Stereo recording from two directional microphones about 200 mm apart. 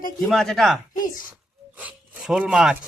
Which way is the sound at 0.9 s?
40° left (ahead or behind).